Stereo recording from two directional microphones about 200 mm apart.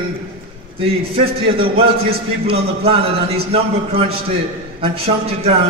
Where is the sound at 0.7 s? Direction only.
30° right (ahead or behind).